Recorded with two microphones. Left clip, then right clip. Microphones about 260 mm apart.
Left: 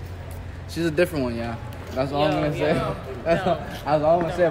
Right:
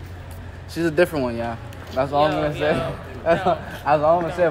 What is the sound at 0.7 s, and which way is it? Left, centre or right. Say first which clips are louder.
A man's voice: right 3 dB; centre.